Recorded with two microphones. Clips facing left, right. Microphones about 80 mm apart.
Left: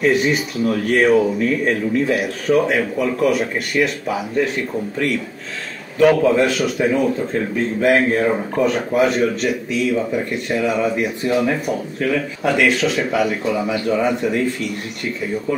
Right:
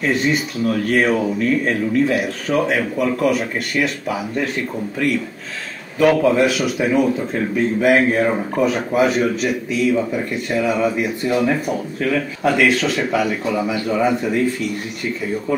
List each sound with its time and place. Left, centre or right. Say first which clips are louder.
0.0 s speech: left 2 dB; centre
5.9 s speech: left 1 dB; centre